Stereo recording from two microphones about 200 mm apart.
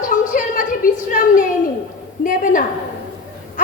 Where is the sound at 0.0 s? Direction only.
40° left (ahead or behind).